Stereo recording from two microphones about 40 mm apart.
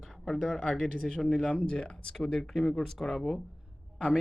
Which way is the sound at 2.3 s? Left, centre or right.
Centre.